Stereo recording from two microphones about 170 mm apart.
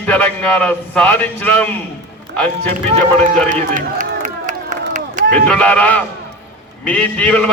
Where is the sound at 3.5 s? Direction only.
50° right (ahead or behind).